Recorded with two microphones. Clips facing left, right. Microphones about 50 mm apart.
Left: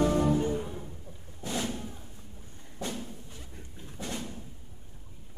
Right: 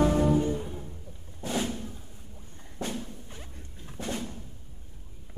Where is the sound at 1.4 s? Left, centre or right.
Right.